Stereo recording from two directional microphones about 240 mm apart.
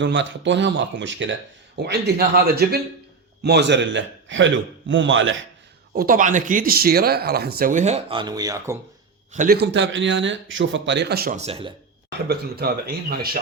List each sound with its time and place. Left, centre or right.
0.0 s speech: right
5.9 s speech: right; by 8.8 s centre
9.3 s speech: right
9.6 s speech: right
12.3 s speech: right